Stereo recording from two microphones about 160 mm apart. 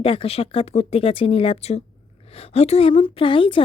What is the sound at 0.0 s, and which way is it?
A woman's voice, 35° left (ahead or behind).